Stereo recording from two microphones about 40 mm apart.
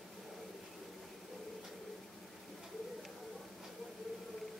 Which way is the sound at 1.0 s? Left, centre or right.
Centre.